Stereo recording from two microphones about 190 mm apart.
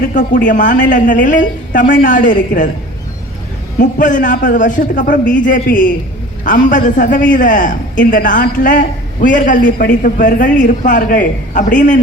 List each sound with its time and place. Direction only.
0.1 s a man's voice: 45° left (ahead or behind)
3.8 s a man's voice: 45° left (ahead or behind)